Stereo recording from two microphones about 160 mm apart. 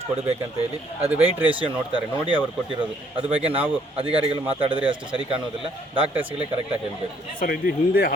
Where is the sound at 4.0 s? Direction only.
35° right (ahead or behind).